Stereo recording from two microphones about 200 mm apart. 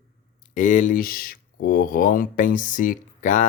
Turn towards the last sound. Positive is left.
turn(degrees=40)  # may be behind; listen again after turning